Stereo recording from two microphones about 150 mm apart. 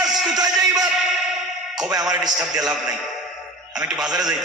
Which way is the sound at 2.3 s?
Centre (ahead or behind).